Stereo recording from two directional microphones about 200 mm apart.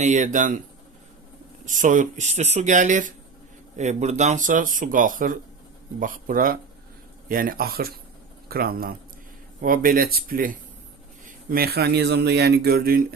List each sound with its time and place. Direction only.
0.0 s speech: 35° right (ahead or behind)
1.6 s speech: 40° right (ahead or behind)